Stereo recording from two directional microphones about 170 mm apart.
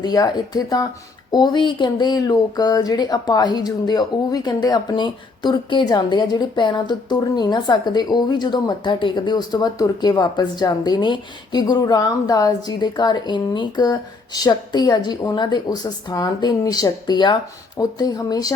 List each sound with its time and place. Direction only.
0.0 s speech: 25° left (ahead or behind)